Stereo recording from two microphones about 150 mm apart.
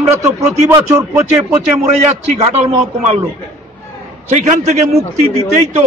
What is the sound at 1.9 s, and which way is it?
A man's voice, 45° right (ahead or behind).